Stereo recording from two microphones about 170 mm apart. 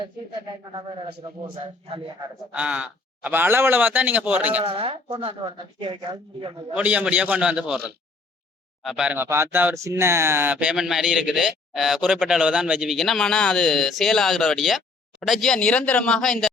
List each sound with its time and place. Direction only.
2.5 s a man's voice: 5° right (ahead or behind)
4.6 s a man's voice: 35° right (ahead or behind)
6.7 s a man's voice: 10° right (ahead or behind)